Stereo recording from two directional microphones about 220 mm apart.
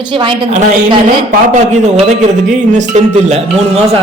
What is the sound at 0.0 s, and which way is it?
A man's voice, 25° right (ahead or behind).